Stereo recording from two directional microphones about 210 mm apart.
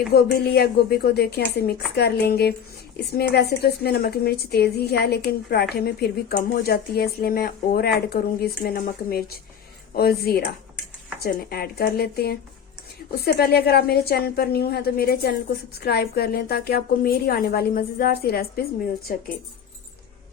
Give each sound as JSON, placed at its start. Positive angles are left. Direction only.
{"t": 0.1, "sound": "a woman's voice", "side_deg": 50}